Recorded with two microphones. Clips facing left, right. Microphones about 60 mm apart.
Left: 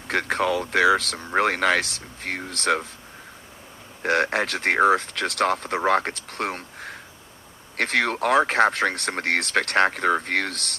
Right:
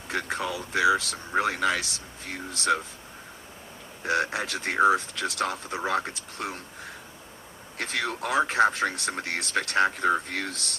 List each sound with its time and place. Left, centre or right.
0.1 s speech: left
4.0 s speech: left